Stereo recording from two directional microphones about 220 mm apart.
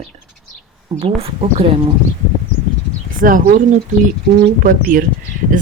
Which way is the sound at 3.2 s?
40° right (ahead or behind).